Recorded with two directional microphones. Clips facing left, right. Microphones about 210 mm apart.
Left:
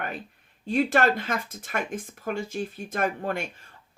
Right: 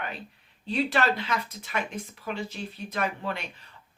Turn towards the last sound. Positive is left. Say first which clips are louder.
# left 4 dB
turn(degrees=45)  # may be behind; listen again after turning